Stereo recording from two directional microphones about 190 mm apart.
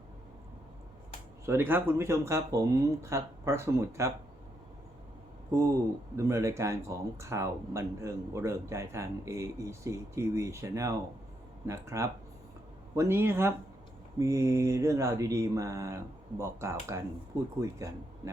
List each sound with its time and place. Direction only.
1.5 s speech: 10° right (ahead or behind)
6.1 s speech: 15° right (ahead or behind)